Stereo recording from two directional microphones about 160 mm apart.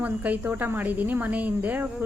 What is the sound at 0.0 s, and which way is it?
Speech, 10° right (ahead or behind).